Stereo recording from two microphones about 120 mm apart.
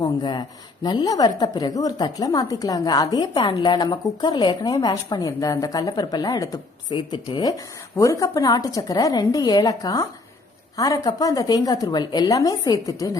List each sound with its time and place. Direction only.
0.0 s speech: 35° left (ahead or behind)
7.9 s a woman's voice: 25° left (ahead or behind)